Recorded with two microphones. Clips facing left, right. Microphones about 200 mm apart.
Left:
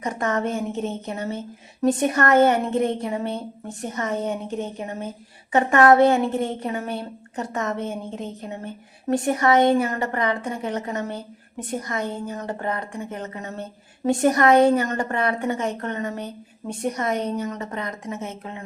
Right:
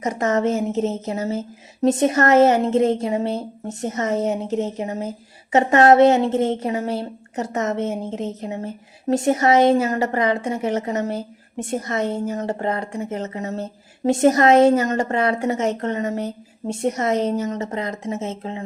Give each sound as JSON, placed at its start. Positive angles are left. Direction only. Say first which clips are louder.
{"t": 0.2, "sound": "a woman's voice", "louder": "right 5 dB", "side_deg": -25}